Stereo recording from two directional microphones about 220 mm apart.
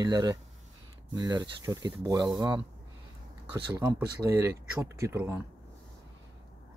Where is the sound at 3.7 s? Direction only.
15° right (ahead or behind).